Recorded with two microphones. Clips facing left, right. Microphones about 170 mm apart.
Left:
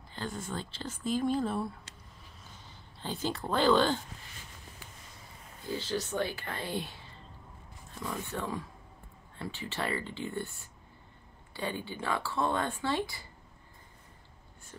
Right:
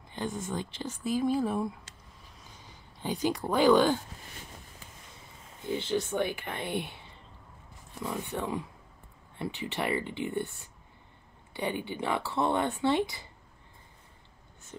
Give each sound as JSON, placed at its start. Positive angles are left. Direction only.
{"t": 0.1, "sound": "speech", "side_deg": -20}
{"t": 5.6, "sound": "speech", "side_deg": -20}
{"t": 11.5, "sound": "speech", "side_deg": -20}